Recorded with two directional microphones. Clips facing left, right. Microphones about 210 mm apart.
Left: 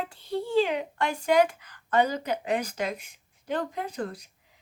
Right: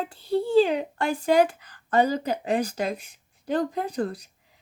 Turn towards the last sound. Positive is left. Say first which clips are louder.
# right 5 dB
turn(degrees=-35)  # may be behind; listen again after turning